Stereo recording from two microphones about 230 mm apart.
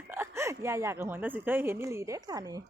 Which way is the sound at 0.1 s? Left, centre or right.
Centre.